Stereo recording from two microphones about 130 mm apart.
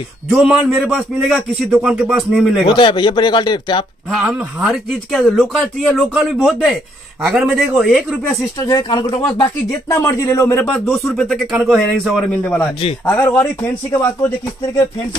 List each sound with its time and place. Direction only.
0.3 s speech: centre (ahead or behind)
2.7 s speech: 40° left (ahead or behind)
4.2 s speech: 10° right (ahead or behind)
8.5 s speech: 30° left (ahead or behind); by 13.5 s 10° left (ahead or behind)